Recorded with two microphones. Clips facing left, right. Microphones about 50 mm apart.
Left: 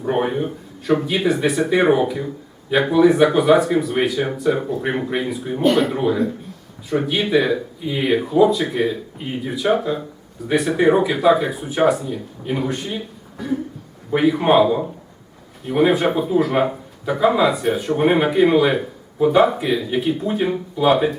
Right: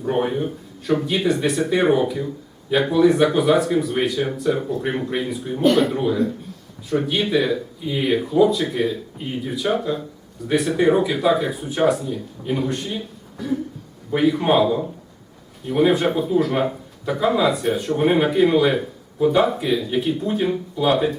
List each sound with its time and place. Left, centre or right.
0.0 s a man's voice: centre